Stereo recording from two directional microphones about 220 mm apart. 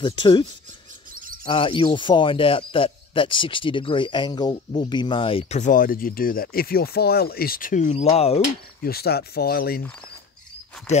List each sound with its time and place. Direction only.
0.0 s speech: 20° left (ahead or behind)
8.8 s speech: 45° left (ahead or behind)